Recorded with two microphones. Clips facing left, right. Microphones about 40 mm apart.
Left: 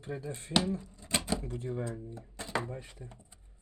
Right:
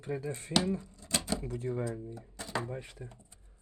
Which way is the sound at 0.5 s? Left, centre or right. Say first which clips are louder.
Left 1 dB; right.